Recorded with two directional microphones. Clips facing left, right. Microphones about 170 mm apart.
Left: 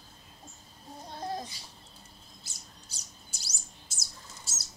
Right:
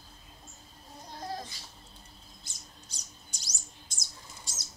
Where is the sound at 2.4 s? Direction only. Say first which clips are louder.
Even; 5° left (ahead or behind).